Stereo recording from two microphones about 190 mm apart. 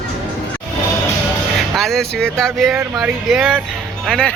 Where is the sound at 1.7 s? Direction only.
Centre (ahead or behind).